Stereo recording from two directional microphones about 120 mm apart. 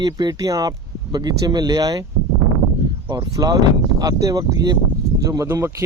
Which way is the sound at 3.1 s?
35° right (ahead or behind).